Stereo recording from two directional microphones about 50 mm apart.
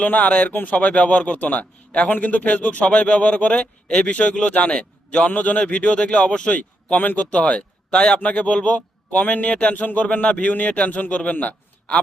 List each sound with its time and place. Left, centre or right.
0.0 s a man's voice: left
6.6 s a man's voice: left